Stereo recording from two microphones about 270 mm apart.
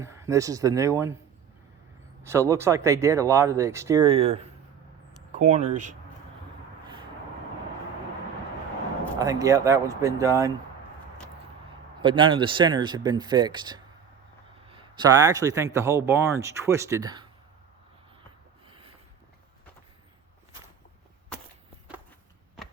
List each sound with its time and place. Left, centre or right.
0.0 s speech: centre
2.2 s speech: centre; by 6.0 s right
9.1 s speech: centre
12.0 s speech: centre
18.7 s a sound: right